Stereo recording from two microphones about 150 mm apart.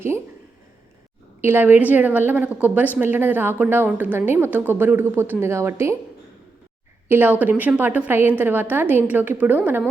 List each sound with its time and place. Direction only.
1.4 s a woman's voice: 15° right (ahead or behind)
7.1 s a woman's voice: 10° right (ahead or behind)